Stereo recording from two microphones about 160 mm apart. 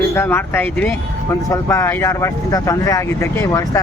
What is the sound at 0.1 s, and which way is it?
Speech, 15° left (ahead or behind).